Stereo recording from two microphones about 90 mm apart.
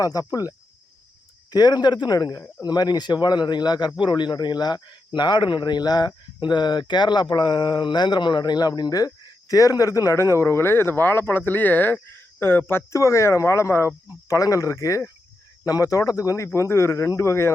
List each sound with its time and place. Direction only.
0.0 s speech: 40° left (ahead or behind)